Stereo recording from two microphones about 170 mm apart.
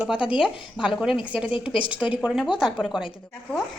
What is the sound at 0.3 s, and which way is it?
Speech, 5° right (ahead or behind).